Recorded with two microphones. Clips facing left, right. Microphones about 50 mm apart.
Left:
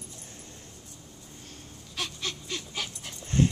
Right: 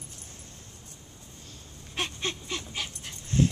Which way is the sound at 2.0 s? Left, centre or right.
Right.